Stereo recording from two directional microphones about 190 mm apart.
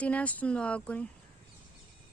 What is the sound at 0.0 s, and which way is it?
Speech, 10° left (ahead or behind).